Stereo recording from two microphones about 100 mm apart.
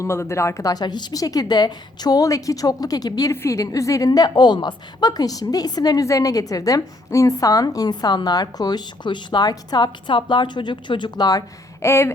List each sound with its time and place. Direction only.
0.0 s a woman's voice: 30° left (ahead or behind)
3.3 s a woman's voice: 30° left (ahead or behind)
11.9 s a sound: 25° left (ahead or behind)